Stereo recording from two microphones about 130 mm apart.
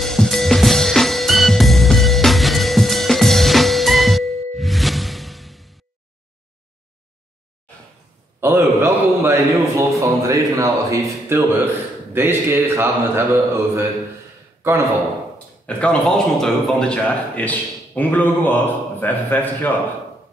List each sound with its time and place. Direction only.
0.0 s music: centre (ahead or behind)
8.4 s a man's voice: 20° right (ahead or behind)
14.6 s a man's voice: 20° right (ahead or behind)
15.3 s speech: 10° left (ahead or behind)